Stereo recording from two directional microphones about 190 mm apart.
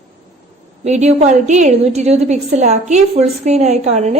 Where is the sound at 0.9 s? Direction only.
35° right (ahead or behind).